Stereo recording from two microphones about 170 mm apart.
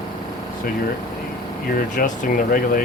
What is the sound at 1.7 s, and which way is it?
Speech, 55° left (ahead or behind).